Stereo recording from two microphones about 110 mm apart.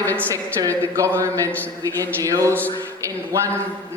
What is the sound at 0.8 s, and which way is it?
A man's voice, 25° right (ahead or behind).